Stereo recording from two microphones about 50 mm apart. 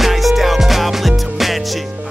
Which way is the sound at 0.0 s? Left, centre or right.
Centre.